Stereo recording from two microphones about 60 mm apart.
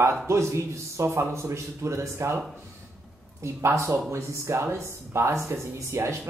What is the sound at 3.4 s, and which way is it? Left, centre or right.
Speech, right.